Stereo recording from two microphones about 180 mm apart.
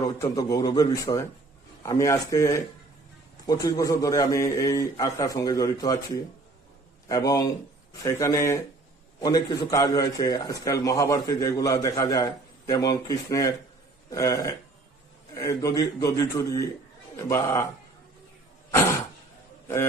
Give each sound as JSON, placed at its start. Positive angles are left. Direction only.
{"t": 0.2, "sound": "a man's voice", "side_deg": 20}
{"t": 7.1, "sound": "a man's voice", "side_deg": 20}